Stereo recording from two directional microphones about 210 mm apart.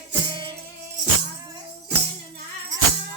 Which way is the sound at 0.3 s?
20° right (ahead or behind).